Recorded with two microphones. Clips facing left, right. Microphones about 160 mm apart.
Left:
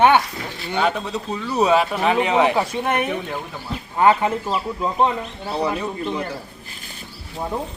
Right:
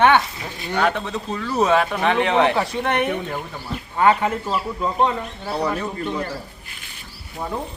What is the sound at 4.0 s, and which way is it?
Speech, 25° left (ahead or behind).